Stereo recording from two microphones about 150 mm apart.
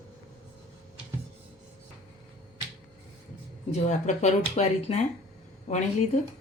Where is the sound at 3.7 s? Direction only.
50° left (ahead or behind).